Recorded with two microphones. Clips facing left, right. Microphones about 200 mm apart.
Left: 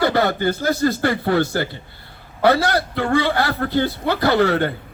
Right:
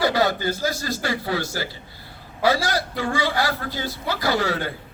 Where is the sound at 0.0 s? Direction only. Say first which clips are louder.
Left 3 dB; 60° left (ahead or behind).